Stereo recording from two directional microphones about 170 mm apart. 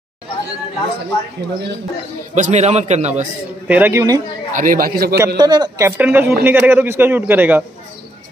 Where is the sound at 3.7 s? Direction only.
15° right (ahead or behind).